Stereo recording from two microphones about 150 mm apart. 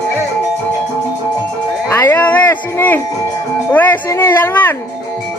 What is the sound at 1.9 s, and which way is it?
Music, 20° left (ahead or behind).